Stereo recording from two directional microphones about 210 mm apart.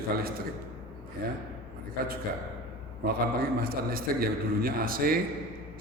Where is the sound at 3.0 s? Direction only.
45° right (ahead or behind).